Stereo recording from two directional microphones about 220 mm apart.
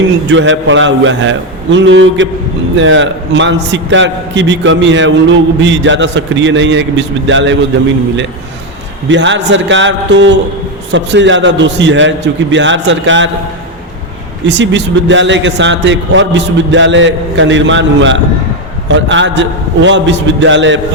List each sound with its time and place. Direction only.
0.3 s a man's voice: 55° right (ahead or behind)
9.0 s a man's voice: 55° right (ahead or behind)
14.4 s a man's voice: 55° right (ahead or behind)